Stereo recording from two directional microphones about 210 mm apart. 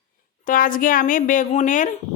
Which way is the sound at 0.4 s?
40° left (ahead or behind).